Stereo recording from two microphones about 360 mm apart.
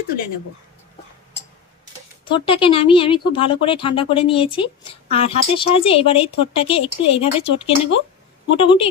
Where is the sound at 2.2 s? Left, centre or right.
Centre.